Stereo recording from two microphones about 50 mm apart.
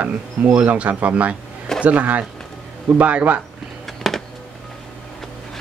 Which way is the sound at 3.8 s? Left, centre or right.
Centre.